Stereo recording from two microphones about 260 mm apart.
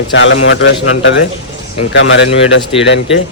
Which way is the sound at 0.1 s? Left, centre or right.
Left.